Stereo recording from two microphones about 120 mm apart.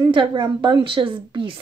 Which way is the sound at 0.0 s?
40° right (ahead or behind).